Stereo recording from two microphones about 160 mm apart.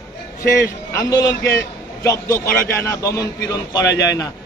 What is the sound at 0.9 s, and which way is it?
A man's voice, 20° left (ahead or behind).